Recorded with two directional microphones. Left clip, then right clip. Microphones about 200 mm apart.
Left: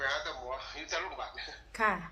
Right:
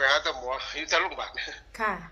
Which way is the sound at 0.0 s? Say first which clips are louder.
Right 10 dB; 55° right (ahead or behind).